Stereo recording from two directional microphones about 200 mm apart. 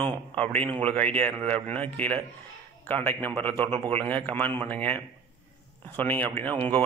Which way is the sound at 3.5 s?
25° right (ahead or behind).